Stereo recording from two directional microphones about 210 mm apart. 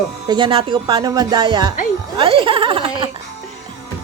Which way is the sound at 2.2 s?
25° right (ahead or behind).